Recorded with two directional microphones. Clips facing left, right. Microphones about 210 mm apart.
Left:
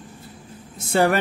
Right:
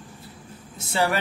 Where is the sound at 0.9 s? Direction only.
50° left (ahead or behind).